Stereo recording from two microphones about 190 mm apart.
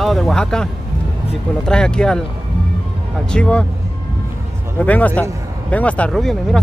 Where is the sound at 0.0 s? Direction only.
Centre (ahead or behind).